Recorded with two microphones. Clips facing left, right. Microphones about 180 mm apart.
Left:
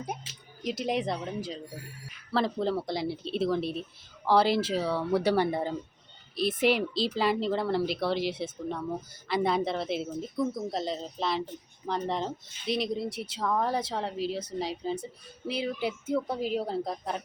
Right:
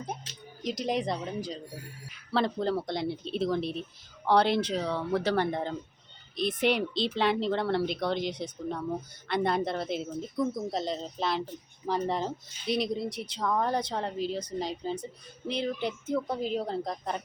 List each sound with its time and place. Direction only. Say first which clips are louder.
0.0 s music: left 1 dB; 5° left (ahead or behind)
2.3 s speech: even; centre (ahead or behind)